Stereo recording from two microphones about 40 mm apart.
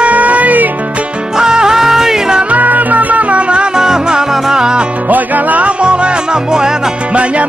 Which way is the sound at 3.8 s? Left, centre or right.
Centre.